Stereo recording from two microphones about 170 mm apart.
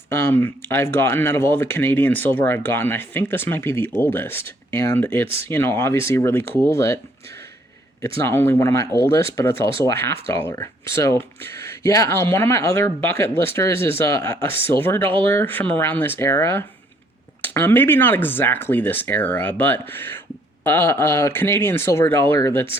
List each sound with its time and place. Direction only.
0.1 s speech: 15° left (ahead or behind)
8.0 s speech: 15° left (ahead or behind)